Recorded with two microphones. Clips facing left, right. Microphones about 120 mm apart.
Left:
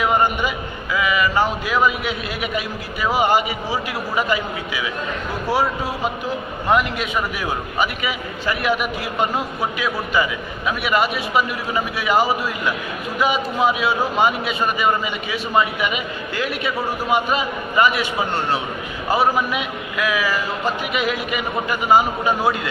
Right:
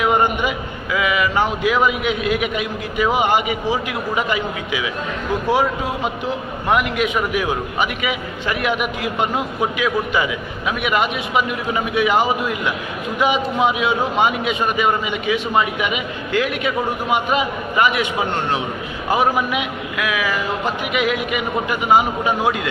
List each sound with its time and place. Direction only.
0.0 s a man's voice: 15° right (ahead or behind)